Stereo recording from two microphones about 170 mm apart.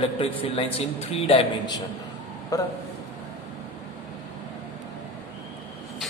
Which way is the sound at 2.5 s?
20° left (ahead or behind).